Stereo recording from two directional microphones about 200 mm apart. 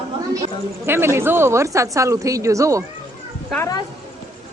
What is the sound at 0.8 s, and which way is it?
A woman's voice, 10° right (ahead or behind).